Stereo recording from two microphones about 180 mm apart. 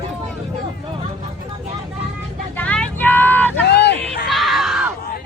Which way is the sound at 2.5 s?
5° left (ahead or behind).